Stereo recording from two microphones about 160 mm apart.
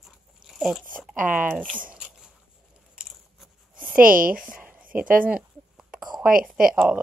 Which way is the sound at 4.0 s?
60° right (ahead or behind).